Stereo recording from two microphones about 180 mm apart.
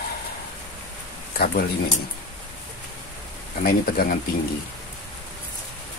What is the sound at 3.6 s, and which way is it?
Speech, 55° left (ahead or behind).